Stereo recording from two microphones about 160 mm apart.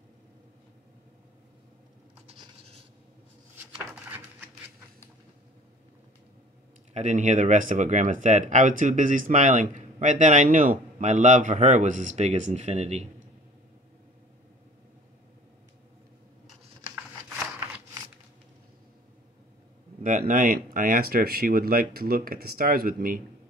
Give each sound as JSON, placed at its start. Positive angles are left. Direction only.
{"t": 3.7, "sound": "a sound", "side_deg": -10}
{"t": 6.9, "sound": "speech", "side_deg": -45}
{"t": 20.0, "sound": "speech", "side_deg": -55}